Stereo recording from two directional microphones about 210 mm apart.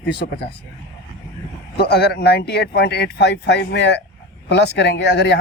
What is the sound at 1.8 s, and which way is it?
Speech, 50° left (ahead or behind).